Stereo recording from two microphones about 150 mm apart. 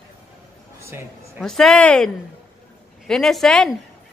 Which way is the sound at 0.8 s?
15° right (ahead or behind).